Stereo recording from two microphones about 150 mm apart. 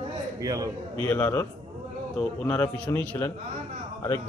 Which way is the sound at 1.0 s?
15° left (ahead or behind).